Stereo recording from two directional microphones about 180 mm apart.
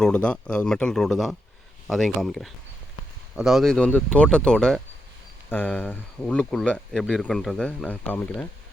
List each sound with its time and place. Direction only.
0.0 s speech: 5° left (ahead or behind)